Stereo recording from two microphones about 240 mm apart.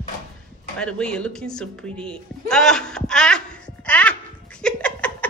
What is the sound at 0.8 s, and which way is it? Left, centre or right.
Music, centre.